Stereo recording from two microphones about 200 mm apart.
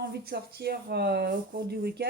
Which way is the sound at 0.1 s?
55° right (ahead or behind).